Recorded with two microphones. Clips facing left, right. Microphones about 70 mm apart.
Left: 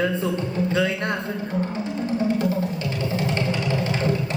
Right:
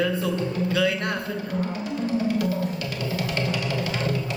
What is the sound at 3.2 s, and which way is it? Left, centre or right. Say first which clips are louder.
Music: left 2 dB; left.